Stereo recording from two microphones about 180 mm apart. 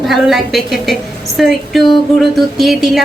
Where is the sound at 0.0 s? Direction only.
Centre (ahead or behind).